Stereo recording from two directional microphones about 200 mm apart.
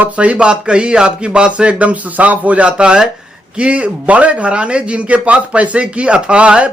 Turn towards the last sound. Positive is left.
turn(degrees=-5)  # may be behind; listen again after turning